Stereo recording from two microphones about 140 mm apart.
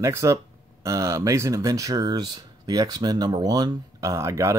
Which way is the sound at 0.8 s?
20° right (ahead or behind).